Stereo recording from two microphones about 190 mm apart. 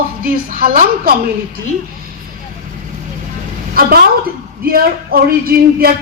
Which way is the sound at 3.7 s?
50° right (ahead or behind).